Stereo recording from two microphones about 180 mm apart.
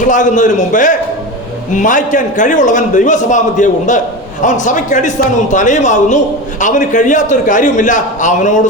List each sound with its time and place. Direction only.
0.0 s a man's voice: 45° left (ahead or behind)